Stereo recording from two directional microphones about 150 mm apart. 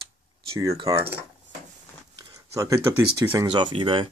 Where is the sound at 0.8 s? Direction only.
15° right (ahead or behind).